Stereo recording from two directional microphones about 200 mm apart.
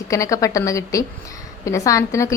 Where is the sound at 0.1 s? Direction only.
15° left (ahead or behind).